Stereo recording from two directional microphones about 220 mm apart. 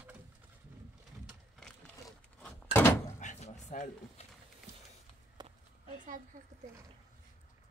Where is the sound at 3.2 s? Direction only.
35° left (ahead or behind).